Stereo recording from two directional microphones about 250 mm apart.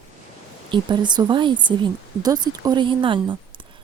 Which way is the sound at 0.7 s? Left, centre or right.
Centre.